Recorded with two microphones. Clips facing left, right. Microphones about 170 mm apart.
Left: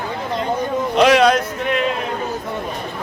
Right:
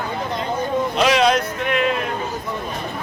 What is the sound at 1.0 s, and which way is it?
Speech, 55° left (ahead or behind).